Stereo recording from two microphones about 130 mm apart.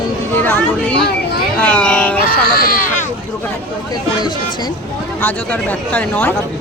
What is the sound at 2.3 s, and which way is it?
Speech, 90° left.